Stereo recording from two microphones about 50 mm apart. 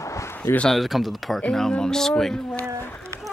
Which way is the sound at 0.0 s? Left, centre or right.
Left.